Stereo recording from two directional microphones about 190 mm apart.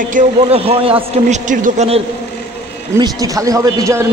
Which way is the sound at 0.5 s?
30° right (ahead or behind).